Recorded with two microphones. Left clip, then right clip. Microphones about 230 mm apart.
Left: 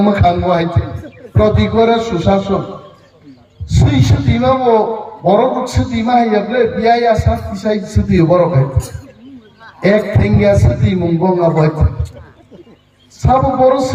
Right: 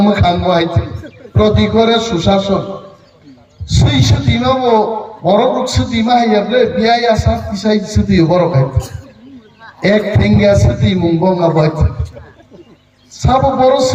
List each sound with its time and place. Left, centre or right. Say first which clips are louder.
0.0 s music: even; right
1.4 s a man's voice: even; right
3.7 s a man's voice: right 2 dB; right
9.8 s a man's voice: even; right
13.1 s a man's voice: even; right